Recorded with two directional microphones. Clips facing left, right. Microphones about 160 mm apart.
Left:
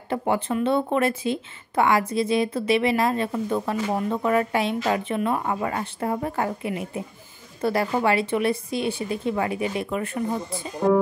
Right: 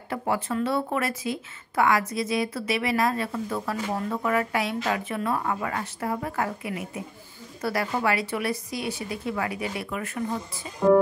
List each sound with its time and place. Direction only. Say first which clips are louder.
0.1 s a woman's voice: left 3 dB; 25° left (ahead or behind)